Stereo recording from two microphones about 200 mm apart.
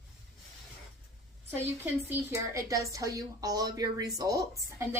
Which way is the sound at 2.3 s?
15° right (ahead or behind).